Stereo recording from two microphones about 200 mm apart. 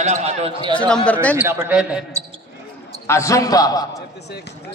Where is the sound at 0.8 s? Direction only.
5° left (ahead or behind).